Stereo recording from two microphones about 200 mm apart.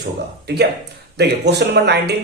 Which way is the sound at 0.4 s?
55° right (ahead or behind).